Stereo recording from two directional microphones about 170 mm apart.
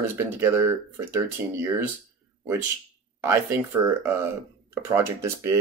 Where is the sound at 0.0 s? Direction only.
15° right (ahead or behind).